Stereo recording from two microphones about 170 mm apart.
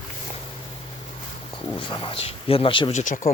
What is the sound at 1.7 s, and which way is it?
A man's voice, 30° left (ahead or behind).